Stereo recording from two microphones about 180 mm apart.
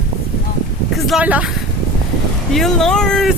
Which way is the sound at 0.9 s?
Centre (ahead or behind).